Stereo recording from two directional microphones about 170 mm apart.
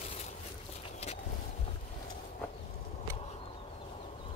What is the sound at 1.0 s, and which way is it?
Vehicle, 40° left (ahead or behind).